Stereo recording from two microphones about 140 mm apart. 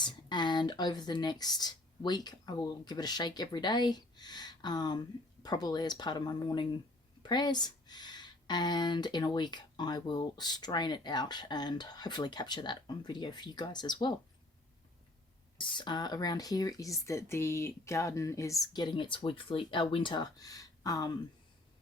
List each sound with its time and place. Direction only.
0.0 s speech: 30° left (ahead or behind)
15.5 s speech: 35° left (ahead or behind)